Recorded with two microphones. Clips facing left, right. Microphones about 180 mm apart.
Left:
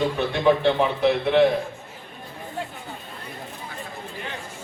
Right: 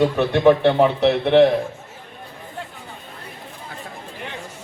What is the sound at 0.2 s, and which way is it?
A man's voice, 60° right (ahead or behind).